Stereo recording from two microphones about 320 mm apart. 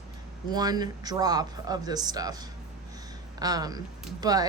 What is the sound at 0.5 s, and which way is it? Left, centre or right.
Speech, centre.